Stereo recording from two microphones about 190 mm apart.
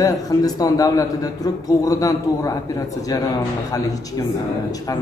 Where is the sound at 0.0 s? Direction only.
20° left (ahead or behind).